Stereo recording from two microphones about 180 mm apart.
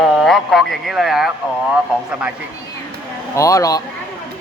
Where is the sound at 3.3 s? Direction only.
20° left (ahead or behind).